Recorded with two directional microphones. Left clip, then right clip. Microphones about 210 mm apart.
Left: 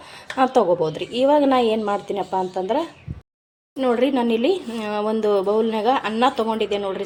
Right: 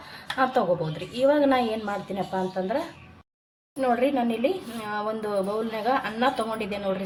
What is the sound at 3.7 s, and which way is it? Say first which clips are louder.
A woman's voice: left 4 dB; 40° left (ahead or behind).